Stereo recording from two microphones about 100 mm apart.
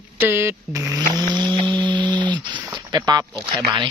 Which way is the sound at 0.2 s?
25° right (ahead or behind).